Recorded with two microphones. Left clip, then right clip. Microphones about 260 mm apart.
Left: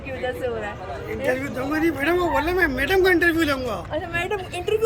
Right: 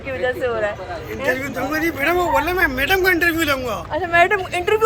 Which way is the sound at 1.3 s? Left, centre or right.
Centre.